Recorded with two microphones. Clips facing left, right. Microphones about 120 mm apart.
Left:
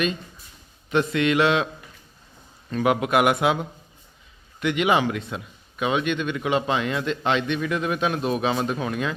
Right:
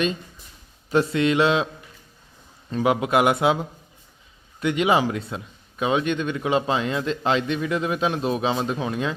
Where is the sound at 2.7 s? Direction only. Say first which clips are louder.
Even; 25° right (ahead or behind).